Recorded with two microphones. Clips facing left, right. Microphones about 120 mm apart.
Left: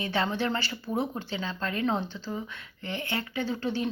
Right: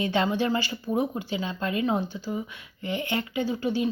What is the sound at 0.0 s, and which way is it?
Speech, 15° right (ahead or behind).